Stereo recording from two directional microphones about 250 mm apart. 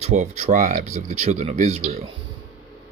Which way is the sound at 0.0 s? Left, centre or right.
Right.